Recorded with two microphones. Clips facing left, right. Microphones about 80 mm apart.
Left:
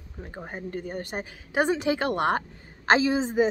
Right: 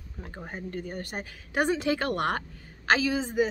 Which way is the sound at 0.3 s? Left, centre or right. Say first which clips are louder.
Left 2 dB; centre.